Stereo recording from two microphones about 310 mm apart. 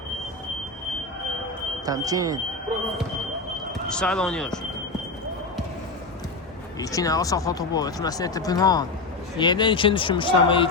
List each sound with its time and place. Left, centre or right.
1.8 s speech: centre
3.8 s speech: centre
6.7 s speech: centre